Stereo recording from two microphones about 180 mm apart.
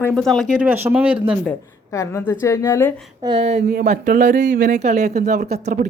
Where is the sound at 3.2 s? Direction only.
30° right (ahead or behind).